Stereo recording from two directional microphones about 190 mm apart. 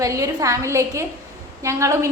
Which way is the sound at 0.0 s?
15° right (ahead or behind).